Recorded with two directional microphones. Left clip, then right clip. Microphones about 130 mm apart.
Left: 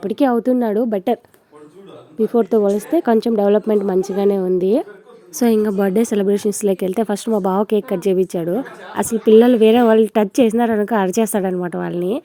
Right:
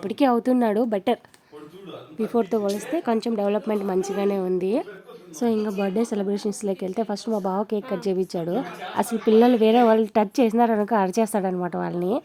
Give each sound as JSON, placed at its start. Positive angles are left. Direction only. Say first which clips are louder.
{"t": 0.0, "sound": "a woman's voice", "louder": "left 4 dB", "side_deg": 10}
{"t": 5.4, "sound": "speech", "louder": "left 8 dB", "side_deg": 40}